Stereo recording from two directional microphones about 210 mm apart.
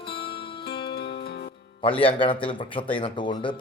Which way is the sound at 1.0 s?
50° left (ahead or behind).